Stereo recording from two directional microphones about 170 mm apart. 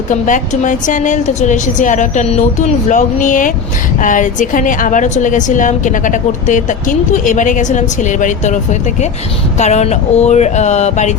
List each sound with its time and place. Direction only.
0.1 s a woman's voice: 50° left (ahead or behind)
9.6 s speech: 40° left (ahead or behind)